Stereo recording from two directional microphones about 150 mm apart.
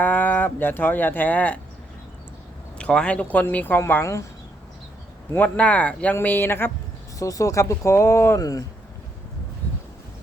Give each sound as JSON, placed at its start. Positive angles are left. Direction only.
{"t": 0.0, "sound": "speech", "side_deg": 10}
{"t": 2.7, "sound": "speech", "side_deg": 5}
{"t": 5.3, "sound": "speech", "side_deg": 10}
{"t": 9.6, "sound": "a sound", "side_deg": 10}